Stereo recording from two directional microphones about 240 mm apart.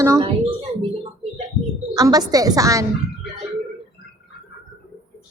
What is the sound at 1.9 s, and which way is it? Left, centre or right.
Speech, centre.